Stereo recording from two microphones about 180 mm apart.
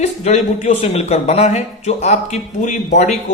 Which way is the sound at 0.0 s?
40° left (ahead or behind).